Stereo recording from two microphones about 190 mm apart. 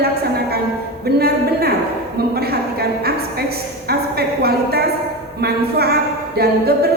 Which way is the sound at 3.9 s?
55° right (ahead or behind).